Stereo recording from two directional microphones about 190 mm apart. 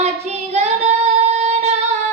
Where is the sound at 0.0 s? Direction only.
35° right (ahead or behind).